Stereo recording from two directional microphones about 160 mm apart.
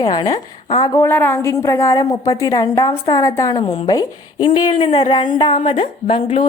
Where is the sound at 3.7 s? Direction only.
35° left (ahead or behind).